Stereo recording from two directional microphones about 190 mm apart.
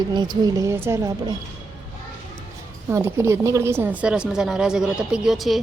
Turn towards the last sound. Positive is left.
turn(degrees=0)  # may be behind; listen again after turning